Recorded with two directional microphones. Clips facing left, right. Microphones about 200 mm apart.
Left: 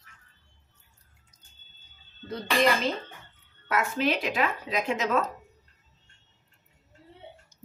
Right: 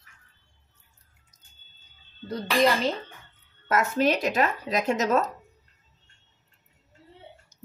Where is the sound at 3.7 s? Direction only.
40° right (ahead or behind).